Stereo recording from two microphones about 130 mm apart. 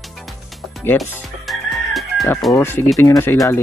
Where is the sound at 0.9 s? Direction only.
15° left (ahead or behind).